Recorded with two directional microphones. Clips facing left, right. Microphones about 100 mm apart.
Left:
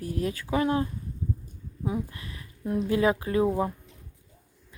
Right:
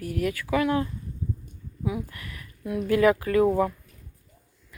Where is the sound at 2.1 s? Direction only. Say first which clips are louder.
Right 1 dB; 25° left (ahead or behind).